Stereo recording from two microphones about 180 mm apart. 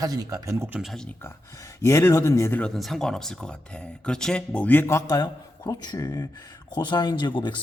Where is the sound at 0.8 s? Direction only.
Centre (ahead or behind).